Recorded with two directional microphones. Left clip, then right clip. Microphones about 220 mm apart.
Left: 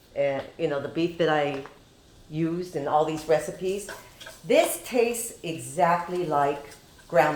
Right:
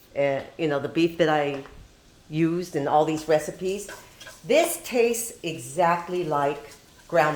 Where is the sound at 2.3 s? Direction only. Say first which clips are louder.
Right 4 dB; 50° right (ahead or behind).